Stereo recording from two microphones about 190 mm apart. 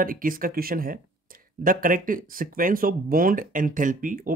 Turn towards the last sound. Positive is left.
turn(degrees=-45)  # may be behind; listen again after turning